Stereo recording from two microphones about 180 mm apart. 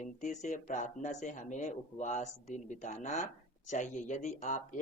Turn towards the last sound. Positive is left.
turn(degrees=45)  # may be behind; listen again after turning